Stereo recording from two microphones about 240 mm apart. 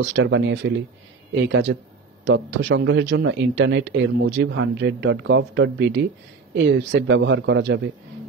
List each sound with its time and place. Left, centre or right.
0.0 s a man's voice: right